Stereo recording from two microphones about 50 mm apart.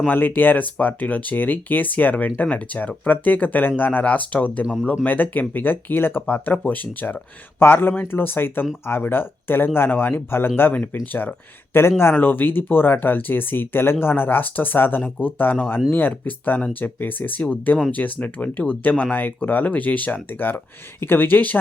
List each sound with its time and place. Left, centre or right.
0.1 s speech: left
7.6 s speech: left
11.7 s speech: left